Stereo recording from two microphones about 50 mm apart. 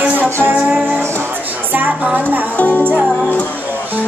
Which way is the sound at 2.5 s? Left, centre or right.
Left.